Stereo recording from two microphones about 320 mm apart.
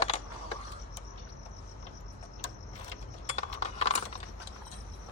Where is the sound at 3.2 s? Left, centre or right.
Left.